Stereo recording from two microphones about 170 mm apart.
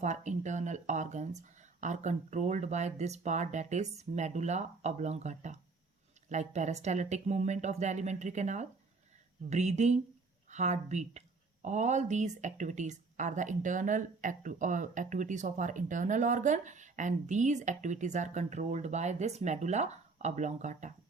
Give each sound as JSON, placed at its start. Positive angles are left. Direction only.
{"t": 0.0, "sound": "speech", "side_deg": -45}